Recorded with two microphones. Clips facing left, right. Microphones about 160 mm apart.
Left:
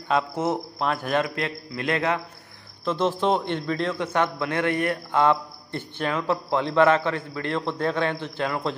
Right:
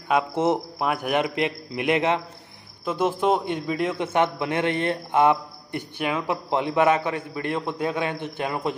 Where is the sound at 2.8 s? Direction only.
10° right (ahead or behind).